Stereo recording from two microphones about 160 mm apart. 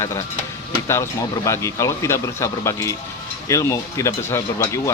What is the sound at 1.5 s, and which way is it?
Speech, 20° left (ahead or behind).